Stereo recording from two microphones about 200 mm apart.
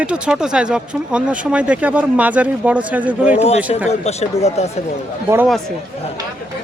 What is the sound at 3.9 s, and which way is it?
Speech, 30° left (ahead or behind).